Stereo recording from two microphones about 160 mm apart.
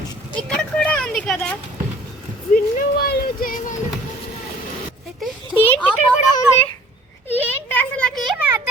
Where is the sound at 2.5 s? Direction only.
65° left (ahead or behind).